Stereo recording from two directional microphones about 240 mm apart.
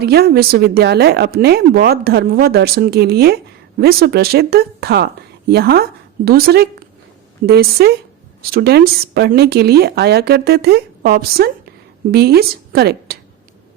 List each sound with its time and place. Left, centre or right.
0.0 s a woman's voice: right